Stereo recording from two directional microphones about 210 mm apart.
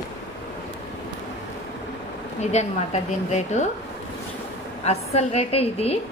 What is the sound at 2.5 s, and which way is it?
A woman's voice, 35° left (ahead or behind).